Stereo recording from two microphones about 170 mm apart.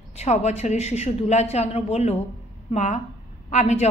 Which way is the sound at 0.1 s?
40° left (ahead or behind).